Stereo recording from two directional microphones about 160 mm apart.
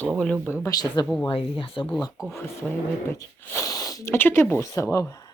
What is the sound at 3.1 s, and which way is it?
Speech, 20° left (ahead or behind).